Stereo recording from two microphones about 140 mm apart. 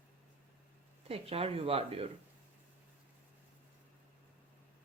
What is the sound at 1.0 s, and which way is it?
Speech, 45° right (ahead or behind).